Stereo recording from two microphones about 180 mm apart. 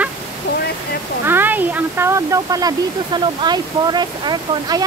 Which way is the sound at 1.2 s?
10° right (ahead or behind).